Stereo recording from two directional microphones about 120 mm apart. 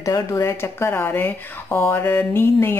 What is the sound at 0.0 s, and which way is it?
A woman's voice, 25° left (ahead or behind).